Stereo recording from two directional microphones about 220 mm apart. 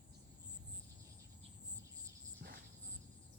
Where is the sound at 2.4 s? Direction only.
45° right (ahead or behind).